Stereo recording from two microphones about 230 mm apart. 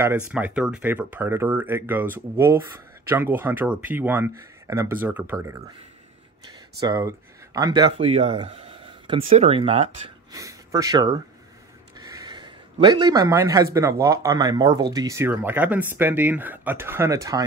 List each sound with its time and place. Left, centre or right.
0.3 s speech: centre
6.8 s speech: centre
12.1 s a sound: centre
13.7 s speech: centre